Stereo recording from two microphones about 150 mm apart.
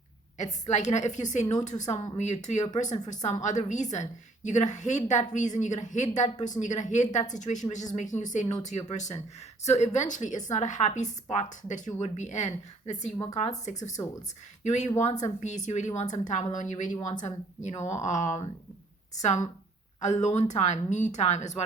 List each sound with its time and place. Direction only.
0.3 s a woman's voice: 50° left (ahead or behind)
14.6 s a woman's voice: 50° left (ahead or behind)